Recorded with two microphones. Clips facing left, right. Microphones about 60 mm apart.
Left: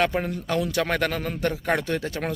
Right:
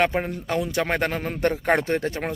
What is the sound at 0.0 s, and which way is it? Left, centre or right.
A man's voice, right.